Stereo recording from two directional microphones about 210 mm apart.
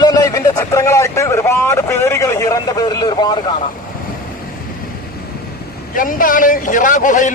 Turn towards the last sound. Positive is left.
turn(degrees=35)  # may be behind; listen again after turning